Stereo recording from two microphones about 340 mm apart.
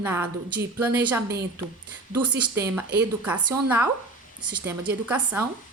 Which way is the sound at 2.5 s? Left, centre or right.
Centre.